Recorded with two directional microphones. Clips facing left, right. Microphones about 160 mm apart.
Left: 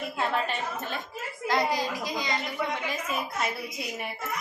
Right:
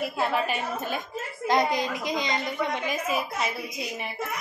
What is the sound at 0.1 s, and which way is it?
A child's voice, 5° right (ahead or behind).